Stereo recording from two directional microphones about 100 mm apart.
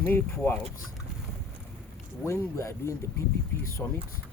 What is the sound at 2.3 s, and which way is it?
Speech, 25° left (ahead or behind).